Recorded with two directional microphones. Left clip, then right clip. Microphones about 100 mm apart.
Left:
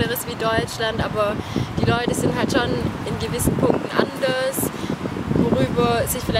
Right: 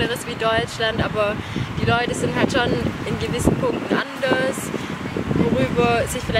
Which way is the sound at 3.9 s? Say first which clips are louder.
Even; 15° left (ahead or behind).